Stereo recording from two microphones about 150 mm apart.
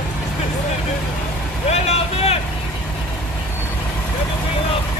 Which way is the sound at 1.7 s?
45° left (ahead or behind).